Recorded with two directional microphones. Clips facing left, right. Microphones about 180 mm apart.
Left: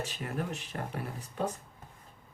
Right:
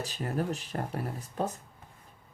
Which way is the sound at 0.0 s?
40° right (ahead or behind).